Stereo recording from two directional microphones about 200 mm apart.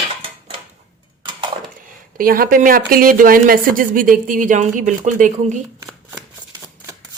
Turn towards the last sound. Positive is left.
turn(degrees=-40)  # may be behind; listen again after turning